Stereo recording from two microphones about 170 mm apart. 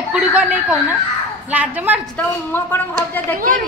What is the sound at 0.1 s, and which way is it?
A woman's voice, 5° right (ahead or behind).